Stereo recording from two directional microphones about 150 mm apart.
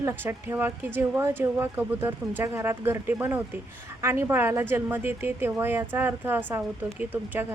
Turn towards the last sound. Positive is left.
turn(degrees=-10)  # may be behind; listen again after turning